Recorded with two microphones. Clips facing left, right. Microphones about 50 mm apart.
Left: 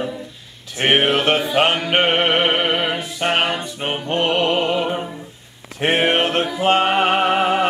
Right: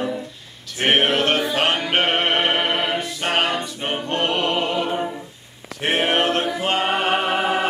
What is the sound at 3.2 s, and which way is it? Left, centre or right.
Music, left.